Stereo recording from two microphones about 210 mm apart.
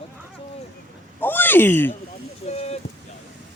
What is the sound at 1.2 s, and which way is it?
Speech, 10° left (ahead or behind).